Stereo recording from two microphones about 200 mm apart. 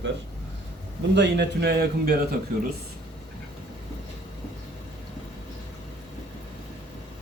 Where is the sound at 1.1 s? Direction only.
55° right (ahead or behind).